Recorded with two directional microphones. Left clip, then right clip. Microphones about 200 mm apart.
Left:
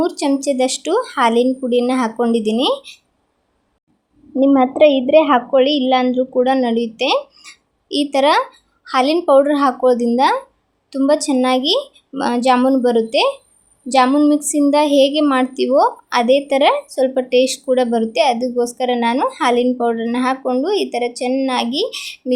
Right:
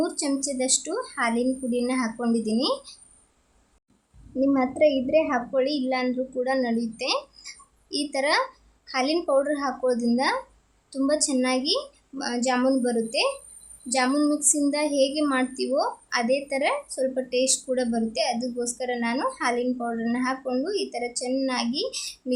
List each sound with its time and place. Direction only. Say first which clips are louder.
0.0 s a woman's voice: left 9 dB; 25° left (ahead or behind)
4.4 s a woman's voice: left 10 dB; 30° left (ahead or behind)